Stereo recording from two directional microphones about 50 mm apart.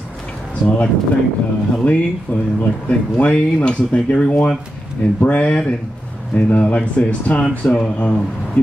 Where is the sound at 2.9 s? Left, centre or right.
Left.